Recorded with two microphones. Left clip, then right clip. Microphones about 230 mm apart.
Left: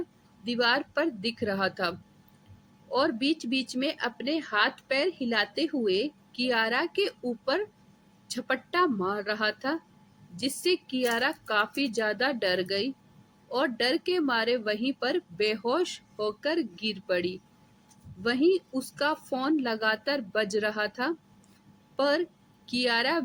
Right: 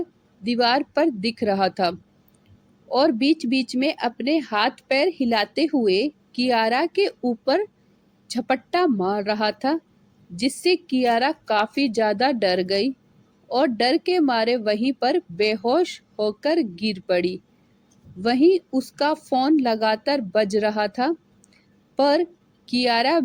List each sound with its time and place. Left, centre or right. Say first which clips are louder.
0.4 s a woman's voice: right 6 dB; centre